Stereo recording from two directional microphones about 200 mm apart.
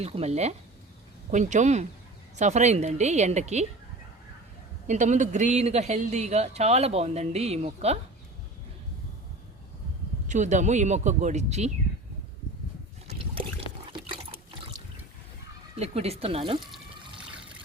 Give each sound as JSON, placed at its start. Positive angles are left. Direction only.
{"t": 0.0, "sound": "speech", "side_deg": -30}
{"t": 4.9, "sound": "speech", "side_deg": -35}
{"t": 10.2, "sound": "speech", "side_deg": -35}
{"t": 13.9, "sound": "water", "side_deg": -25}
{"t": 15.8, "sound": "speech", "side_deg": -30}